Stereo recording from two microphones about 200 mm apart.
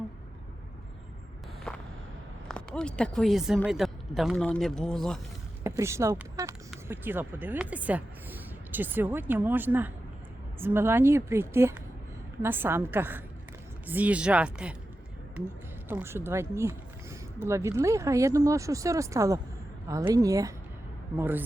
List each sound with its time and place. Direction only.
1.7 s a sound: 5° left (ahead or behind)
2.5 s speech: 5° left (ahead or behind)
5.6 s speech: 15° right (ahead or behind)
15.9 s speech: 10° right (ahead or behind)